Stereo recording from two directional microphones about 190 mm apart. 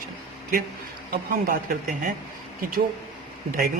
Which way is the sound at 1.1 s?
50° right (ahead or behind).